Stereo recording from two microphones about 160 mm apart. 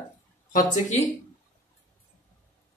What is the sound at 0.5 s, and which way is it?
Speech, 50° left (ahead or behind).